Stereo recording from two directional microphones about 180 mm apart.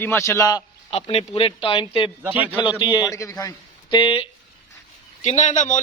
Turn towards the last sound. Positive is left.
turn(degrees=40)  # may be behind; listen again after turning